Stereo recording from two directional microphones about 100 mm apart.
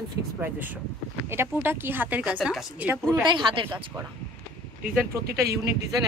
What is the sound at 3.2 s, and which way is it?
Speech, 60° right (ahead or behind).